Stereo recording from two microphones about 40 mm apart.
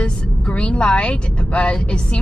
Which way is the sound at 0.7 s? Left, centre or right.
Left.